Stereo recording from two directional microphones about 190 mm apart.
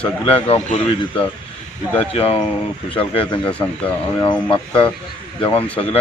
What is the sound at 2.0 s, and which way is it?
Speech, 30° left (ahead or behind).